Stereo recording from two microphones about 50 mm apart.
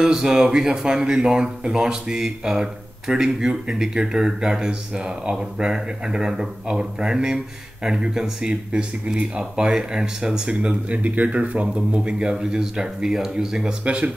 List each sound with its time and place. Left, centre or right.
0.0 s speech: centre